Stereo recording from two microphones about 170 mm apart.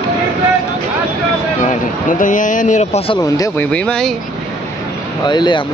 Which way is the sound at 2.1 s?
50° left (ahead or behind).